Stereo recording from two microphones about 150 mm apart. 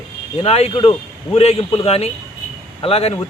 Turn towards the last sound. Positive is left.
turn(degrees=40)  # may be behind; listen again after turning